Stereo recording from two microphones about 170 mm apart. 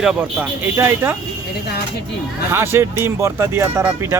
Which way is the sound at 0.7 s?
15° right (ahead or behind).